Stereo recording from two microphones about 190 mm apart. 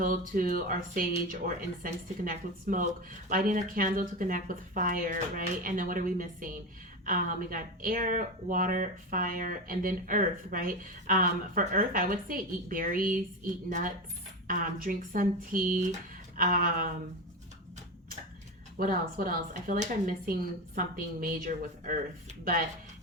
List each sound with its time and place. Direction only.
0.0 s speech: 45° right (ahead or behind)
18.8 s speech: 50° right (ahead or behind)